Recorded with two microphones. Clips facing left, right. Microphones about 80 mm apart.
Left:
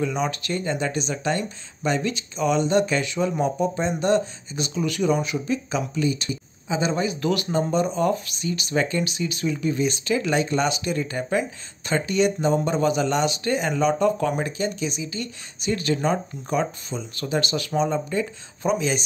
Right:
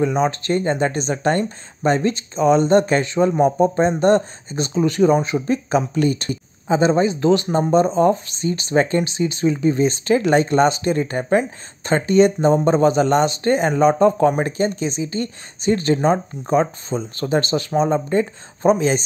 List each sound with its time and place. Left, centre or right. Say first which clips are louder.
0.0 s speech: right 6 dB; right
7.7 s speech: right 9 dB; right